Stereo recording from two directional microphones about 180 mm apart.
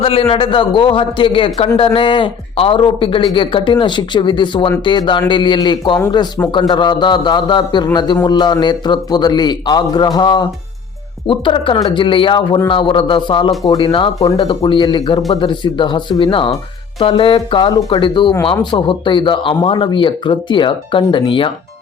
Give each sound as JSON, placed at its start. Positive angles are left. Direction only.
{"t": 0.0, "sound": "a man's voice", "side_deg": 30}